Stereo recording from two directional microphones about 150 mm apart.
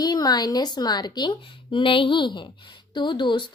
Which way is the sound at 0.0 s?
25° left (ahead or behind).